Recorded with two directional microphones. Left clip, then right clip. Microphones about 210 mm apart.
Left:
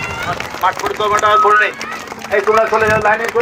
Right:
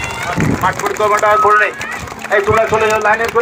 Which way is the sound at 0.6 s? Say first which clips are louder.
Even; 45° right (ahead or behind).